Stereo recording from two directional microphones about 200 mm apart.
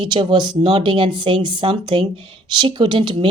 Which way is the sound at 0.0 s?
25° right (ahead or behind).